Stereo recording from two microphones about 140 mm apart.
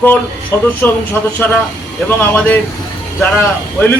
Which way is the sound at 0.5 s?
15° left (ahead or behind).